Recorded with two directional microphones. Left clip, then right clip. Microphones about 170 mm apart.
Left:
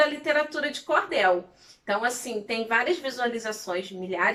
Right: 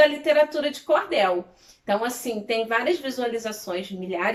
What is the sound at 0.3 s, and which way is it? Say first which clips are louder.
A woman's voice: right 5 dB; 15° right (ahead or behind).